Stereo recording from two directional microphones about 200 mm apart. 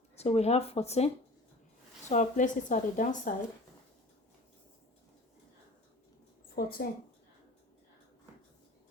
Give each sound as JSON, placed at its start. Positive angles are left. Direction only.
{"t": 0.2, "sound": "a woman's voice", "side_deg": 30}
{"t": 6.6, "sound": "speech", "side_deg": 50}